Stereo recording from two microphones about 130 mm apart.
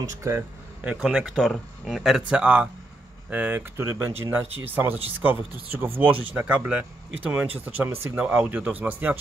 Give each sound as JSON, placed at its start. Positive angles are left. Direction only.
{"t": 0.1, "sound": "speech", "side_deg": -20}
{"t": 0.8, "sound": "speech", "side_deg": -5}